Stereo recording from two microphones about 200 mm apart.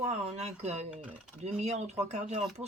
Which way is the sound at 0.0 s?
30° right (ahead or behind).